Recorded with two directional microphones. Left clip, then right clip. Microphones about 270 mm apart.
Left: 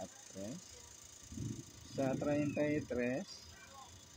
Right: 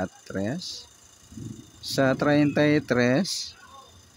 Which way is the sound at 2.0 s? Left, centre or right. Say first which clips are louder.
Right 15 dB; right.